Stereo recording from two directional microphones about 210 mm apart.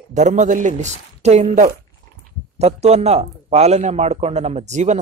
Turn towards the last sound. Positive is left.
turn(degrees=-35)  # may be behind; listen again after turning